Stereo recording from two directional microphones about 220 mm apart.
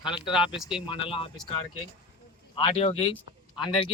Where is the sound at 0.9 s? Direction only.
25° left (ahead or behind).